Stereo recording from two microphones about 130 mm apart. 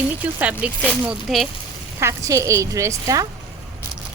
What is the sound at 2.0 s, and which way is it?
A woman's voice, 20° right (ahead or behind).